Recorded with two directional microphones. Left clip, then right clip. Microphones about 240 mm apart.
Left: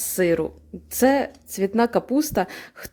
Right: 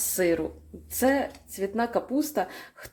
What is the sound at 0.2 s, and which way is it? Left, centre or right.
Speech, left.